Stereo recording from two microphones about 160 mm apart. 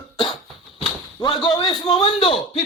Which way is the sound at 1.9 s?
35° left (ahead or behind).